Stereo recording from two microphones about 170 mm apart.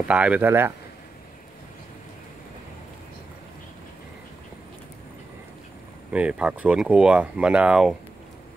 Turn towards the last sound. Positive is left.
turn(degrees=-5)  # may be behind; listen again after turning